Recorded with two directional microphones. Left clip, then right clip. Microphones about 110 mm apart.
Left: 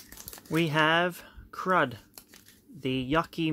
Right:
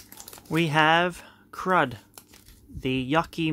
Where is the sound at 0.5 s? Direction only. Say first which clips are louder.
Right 4 dB; 25° right (ahead or behind).